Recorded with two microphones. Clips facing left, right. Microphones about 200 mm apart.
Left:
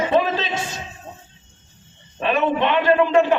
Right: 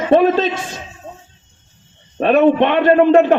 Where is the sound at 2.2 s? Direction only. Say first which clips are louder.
Right 8 dB; 50° right (ahead or behind).